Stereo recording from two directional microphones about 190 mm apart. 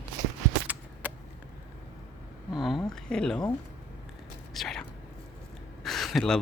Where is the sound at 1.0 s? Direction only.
10° right (ahead or behind).